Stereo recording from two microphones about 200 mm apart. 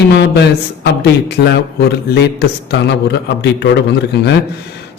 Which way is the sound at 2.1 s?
55° left (ahead or behind).